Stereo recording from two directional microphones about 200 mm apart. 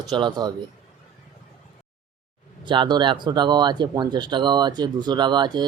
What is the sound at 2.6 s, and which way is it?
Speech, 25° right (ahead or behind).